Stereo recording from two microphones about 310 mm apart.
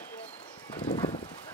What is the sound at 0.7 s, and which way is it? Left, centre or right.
Horse, centre.